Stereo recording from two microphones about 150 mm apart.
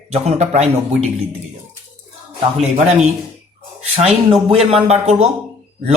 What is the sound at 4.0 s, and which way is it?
Speech, 45° right (ahead or behind).